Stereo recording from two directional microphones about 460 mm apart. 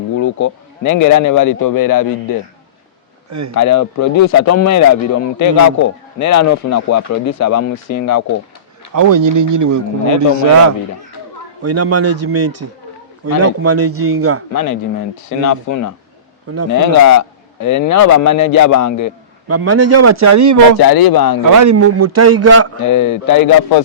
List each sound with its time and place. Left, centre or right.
0.2 s speech: left
3.2 s speech: right
3.5 s speech: left
8.9 s a man's voice: right
11.6 s a man's voice: right
14.5 s speech: left
16.5 s a man's voice: right
16.8 s speech: left
19.5 s a man's voice: right
20.8 s speech: left
21.4 s a man's voice: right
22.8 s speech: left